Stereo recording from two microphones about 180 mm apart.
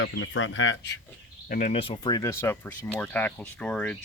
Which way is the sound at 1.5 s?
45° left (ahead or behind).